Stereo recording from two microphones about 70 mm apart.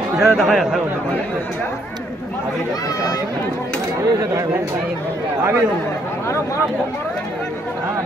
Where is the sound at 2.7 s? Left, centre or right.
Left.